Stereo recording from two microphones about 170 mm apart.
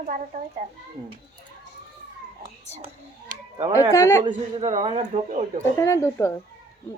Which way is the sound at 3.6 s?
40° right (ahead or behind).